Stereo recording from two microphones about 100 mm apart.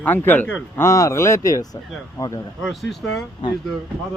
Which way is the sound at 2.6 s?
Centre (ahead or behind).